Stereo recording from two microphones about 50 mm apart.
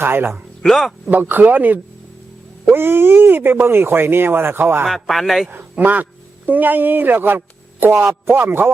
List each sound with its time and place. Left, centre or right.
0.0 s speech: right
0.6 s a man's voice: centre
1.1 s speech: right
2.6 s speech: right
4.9 s a man's voice: centre
5.8 s speech: right